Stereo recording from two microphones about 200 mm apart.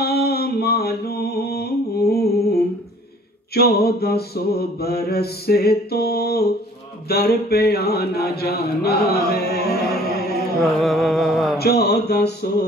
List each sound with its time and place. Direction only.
0.0 s mantra: 50° left (ahead or behind)
10.6 s a sound: centre (ahead or behind)
11.5 s mantra: 50° left (ahead or behind)